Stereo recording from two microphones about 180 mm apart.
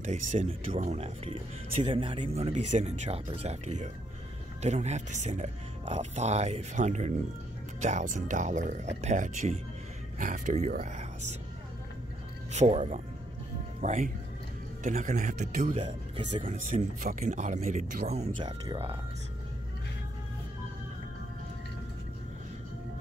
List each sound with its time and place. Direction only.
0.0 s speech: 40° right (ahead or behind)
12.5 s speech: 35° right (ahead or behind)